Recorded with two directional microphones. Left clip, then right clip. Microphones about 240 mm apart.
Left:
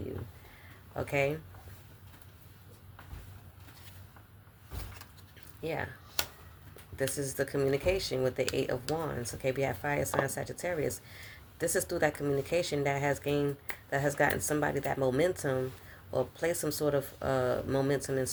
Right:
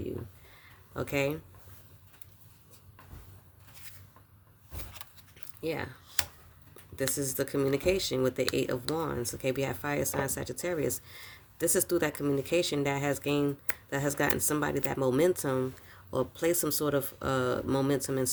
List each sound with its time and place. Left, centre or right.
0.9 s speech: right
5.6 s speech: right
6.9 s speech: right